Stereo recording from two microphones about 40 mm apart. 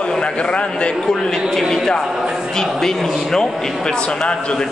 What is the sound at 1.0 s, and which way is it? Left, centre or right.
Speech, centre.